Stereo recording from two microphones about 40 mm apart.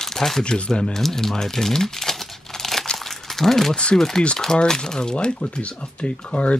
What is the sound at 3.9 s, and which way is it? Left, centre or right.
Speech, centre.